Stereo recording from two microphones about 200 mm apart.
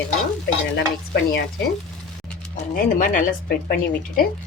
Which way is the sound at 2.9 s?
40° left (ahead or behind).